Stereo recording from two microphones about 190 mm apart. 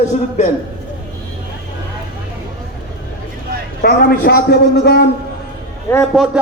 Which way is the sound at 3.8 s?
55° left (ahead or behind).